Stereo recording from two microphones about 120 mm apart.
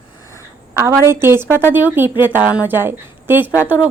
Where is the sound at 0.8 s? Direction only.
20° right (ahead or behind).